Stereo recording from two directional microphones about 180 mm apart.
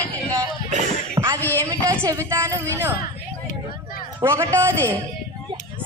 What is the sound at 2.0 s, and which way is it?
Speech, 15° right (ahead or behind).